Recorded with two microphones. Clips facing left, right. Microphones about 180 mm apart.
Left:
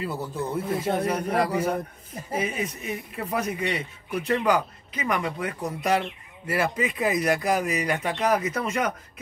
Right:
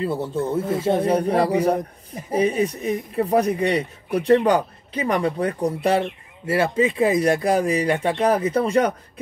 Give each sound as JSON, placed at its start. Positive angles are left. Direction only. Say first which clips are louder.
{"t": 0.0, "sound": "speech", "louder": "right 6 dB", "side_deg": -30}